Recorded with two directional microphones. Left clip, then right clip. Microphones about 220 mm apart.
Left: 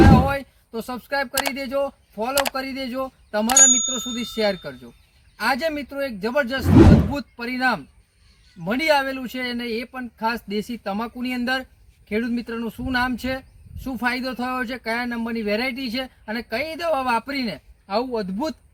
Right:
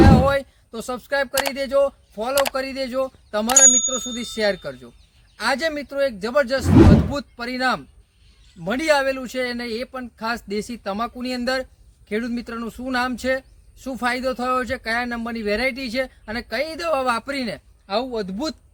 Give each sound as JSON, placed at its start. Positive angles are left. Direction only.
{"t": 0.0, "sound": "music", "side_deg": 0}
{"t": 0.3, "sound": "music", "side_deg": -20}
{"t": 1.5, "sound": "speech", "side_deg": -20}
{"t": 2.3, "sound": "speech", "side_deg": 0}
{"t": 2.6, "sound": "speech", "side_deg": -20}
{"t": 6.7, "sound": "speech", "side_deg": 0}
{"t": 7.2, "sound": "speech", "side_deg": -15}